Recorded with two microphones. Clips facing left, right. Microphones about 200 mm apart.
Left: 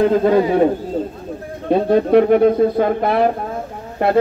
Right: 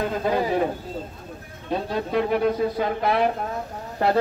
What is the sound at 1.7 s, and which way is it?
Speech, 55° left (ahead or behind).